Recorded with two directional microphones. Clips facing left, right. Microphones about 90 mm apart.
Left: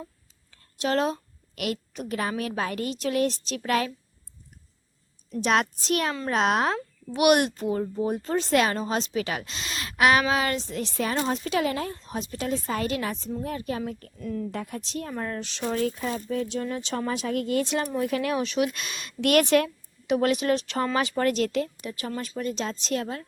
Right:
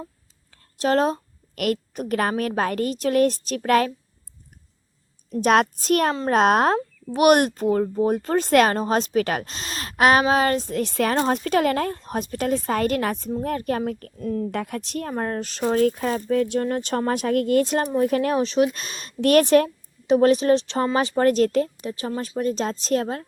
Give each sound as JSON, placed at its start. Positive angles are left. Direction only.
{"t": 0.5, "sound": "a woman's voice", "side_deg": -40}
{"t": 5.3, "sound": "a child's voice", "side_deg": -50}
{"t": 14.5, "sound": "a child's voice", "side_deg": -65}
{"t": 16.0, "sound": "speech", "side_deg": -60}
{"t": 22.4, "sound": "speech", "side_deg": -40}